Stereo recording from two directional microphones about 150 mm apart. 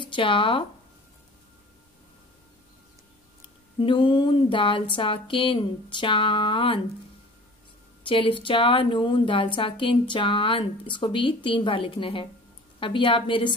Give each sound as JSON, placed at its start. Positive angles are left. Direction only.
{"t": 0.0, "sound": "speech", "side_deg": 35}
{"t": 3.8, "sound": "a woman's voice", "side_deg": 35}
{"t": 8.1, "sound": "a woman's voice", "side_deg": 35}